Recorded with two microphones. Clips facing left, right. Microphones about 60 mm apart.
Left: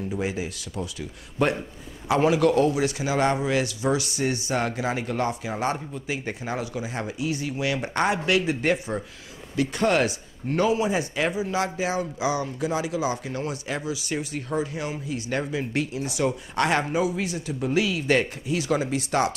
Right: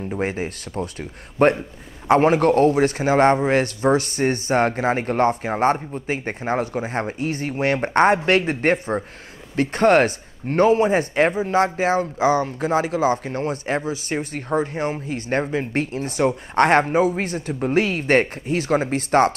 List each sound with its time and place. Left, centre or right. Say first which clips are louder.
0.1 s a man's voice: right 7 dB; right